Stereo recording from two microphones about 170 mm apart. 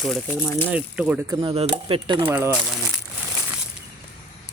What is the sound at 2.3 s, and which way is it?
Speech, 10° right (ahead or behind).